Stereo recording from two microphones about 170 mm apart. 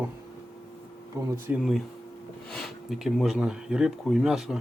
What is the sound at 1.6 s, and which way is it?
Speech, centre (ahead or behind).